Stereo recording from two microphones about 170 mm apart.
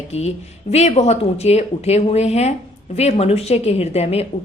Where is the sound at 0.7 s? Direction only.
40° left (ahead or behind).